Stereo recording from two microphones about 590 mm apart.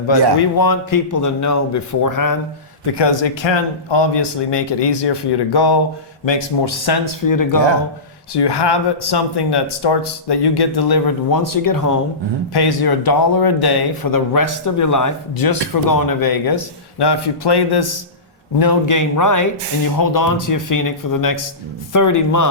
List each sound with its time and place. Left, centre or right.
0.3 s speech: left
2.8 s speech: left